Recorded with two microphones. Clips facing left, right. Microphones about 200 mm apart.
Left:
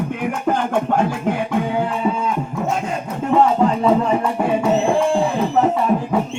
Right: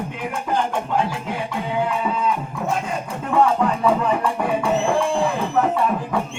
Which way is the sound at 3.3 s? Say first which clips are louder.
Left 3 dB; 25° left (ahead or behind).